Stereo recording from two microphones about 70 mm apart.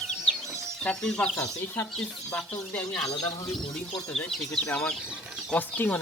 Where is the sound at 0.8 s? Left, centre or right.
Centre.